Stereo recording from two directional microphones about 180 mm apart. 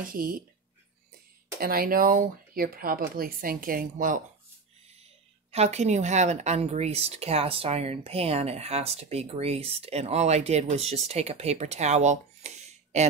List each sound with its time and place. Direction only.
0.0 s speech: 50° right (ahead or behind)
1.6 s speech: 55° right (ahead or behind)
5.5 s speech: 35° right (ahead or behind)